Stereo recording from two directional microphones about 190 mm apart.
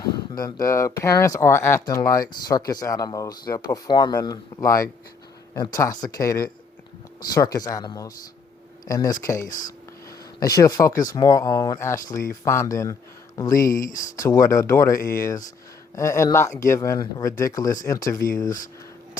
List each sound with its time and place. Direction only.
0.3 s speech: 20° left (ahead or behind)
9.5 s speech: 45° left (ahead or behind)
10.4 s speech: 20° left (ahead or behind)